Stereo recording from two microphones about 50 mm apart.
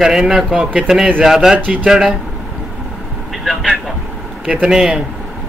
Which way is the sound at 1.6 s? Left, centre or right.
Right.